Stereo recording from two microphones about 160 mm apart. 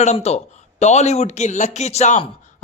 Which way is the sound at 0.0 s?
45° left (ahead or behind).